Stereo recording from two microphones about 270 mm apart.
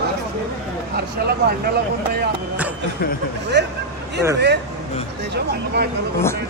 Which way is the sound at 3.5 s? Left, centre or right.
Right.